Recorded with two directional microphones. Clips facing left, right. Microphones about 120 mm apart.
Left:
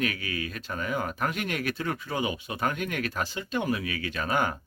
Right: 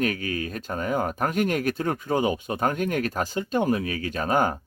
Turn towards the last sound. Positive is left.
turn(degrees=-40)  # may be behind; listen again after turning